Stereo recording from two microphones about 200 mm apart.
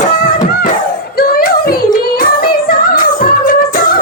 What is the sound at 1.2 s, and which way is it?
Music, 50° left (ahead or behind).